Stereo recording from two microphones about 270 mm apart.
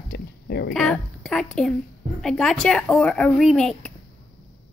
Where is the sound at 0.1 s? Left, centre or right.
Left.